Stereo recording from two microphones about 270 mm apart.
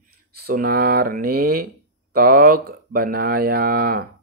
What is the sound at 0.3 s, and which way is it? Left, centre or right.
Speech, right.